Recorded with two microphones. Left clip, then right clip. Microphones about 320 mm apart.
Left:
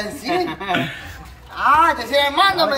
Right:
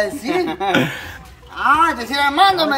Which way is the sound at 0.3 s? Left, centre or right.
Centre.